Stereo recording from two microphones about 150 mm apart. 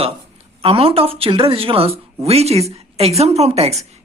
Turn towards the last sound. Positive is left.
turn(degrees=-45)  # may be behind; listen again after turning